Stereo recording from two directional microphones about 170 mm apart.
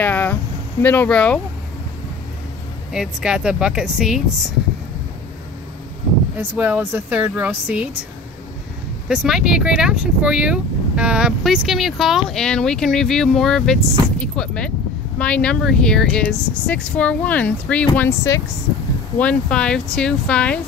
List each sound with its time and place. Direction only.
0.0 s a sound: 10° left (ahead or behind)
0.8 s speech: 10° left (ahead or behind)
2.9 s speech: 5° right (ahead or behind)
6.3 s speech: 10° right (ahead or behind)
9.1 s speech: 5° right (ahead or behind)